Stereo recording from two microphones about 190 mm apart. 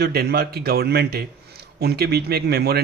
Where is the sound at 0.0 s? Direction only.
55° right (ahead or behind).